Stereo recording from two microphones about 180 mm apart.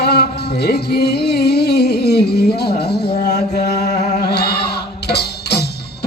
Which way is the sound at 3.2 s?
55° left (ahead or behind).